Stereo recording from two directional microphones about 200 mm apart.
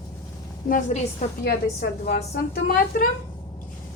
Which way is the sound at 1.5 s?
55° left (ahead or behind).